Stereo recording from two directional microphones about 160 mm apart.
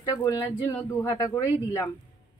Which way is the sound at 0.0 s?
30° left (ahead or behind).